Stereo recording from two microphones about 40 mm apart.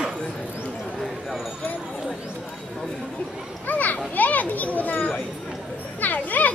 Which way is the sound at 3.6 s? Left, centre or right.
Left.